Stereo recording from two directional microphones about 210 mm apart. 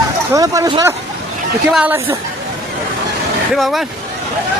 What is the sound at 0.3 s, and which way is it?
Speech, 15° right (ahead or behind).